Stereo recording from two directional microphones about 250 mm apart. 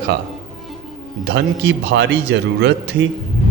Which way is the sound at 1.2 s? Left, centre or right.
Right.